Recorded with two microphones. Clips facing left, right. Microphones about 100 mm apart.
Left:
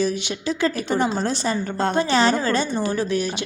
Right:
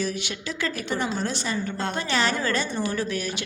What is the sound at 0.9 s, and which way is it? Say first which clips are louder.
A woman's voice: left 5 dB; 35° left (ahead or behind).